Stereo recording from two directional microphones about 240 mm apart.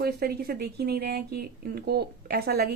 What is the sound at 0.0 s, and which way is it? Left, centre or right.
A woman's voice, right.